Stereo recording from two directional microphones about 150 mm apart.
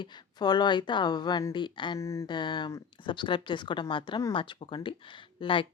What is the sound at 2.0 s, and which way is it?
Speech, 20° left (ahead or behind).